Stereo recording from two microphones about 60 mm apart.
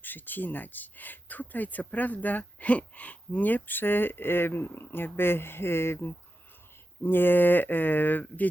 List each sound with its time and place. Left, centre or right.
0.0 s speech: left